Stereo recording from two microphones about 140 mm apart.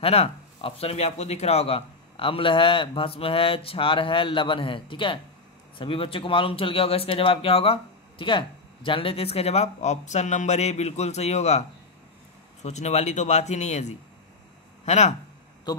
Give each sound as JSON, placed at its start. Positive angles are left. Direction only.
{"t": 0.0, "sound": "a man's voice", "side_deg": 45}
{"t": 12.6, "sound": "a man's voice", "side_deg": 55}